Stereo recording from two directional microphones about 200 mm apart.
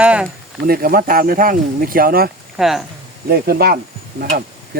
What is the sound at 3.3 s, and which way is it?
Speech, 50° right (ahead or behind).